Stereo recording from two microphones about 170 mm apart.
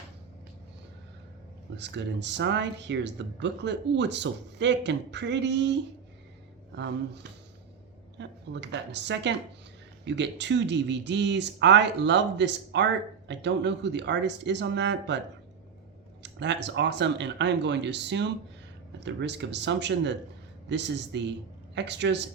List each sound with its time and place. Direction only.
1.7 s speech: 90° right
6.7 s speech: 90° right
16.2 s speech: 90° right